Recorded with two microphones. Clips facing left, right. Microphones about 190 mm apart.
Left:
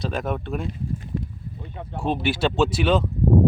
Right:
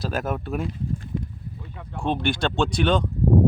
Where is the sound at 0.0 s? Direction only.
5° right (ahead or behind).